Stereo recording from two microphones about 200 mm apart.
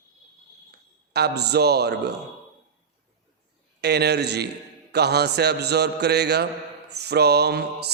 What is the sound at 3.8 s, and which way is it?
A man's voice, 55° right (ahead or behind).